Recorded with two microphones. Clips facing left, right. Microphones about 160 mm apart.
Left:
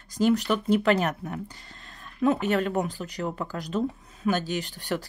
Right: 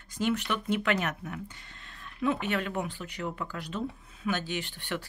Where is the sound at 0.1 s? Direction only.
35° left (ahead or behind).